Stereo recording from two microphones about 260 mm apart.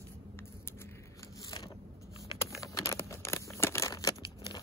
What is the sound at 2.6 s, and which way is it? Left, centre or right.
Crumpling, centre.